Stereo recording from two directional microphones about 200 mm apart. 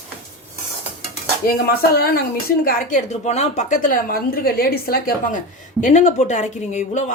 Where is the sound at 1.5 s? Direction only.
50° left (ahead or behind).